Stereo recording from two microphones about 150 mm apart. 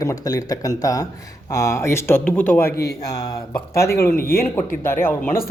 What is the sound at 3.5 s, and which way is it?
Speech, 20° left (ahead or behind).